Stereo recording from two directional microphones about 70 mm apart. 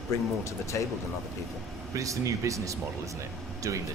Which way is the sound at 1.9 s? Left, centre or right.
Right.